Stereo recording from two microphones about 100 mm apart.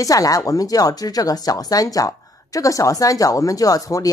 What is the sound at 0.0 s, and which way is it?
A woman's voice, 35° left (ahead or behind).